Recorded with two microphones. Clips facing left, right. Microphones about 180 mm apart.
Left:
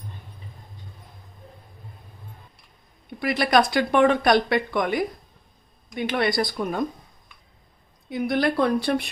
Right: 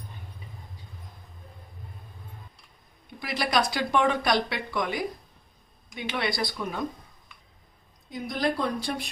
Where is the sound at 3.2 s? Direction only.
55° left (ahead or behind).